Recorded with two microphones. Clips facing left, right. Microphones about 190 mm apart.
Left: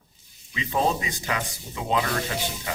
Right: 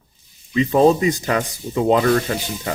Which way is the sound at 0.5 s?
45° right (ahead or behind).